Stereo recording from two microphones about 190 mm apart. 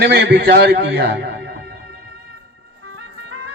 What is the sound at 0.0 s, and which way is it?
A man's voice, 60° right (ahead or behind).